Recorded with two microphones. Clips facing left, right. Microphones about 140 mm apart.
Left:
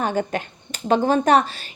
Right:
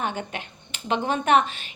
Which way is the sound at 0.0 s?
40° left (ahead or behind).